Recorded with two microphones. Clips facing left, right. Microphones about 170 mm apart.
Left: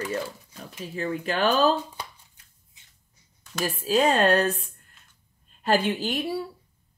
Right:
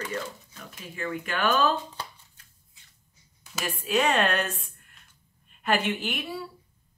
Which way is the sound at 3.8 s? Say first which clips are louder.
Left 4 dB; 35° left (ahead or behind).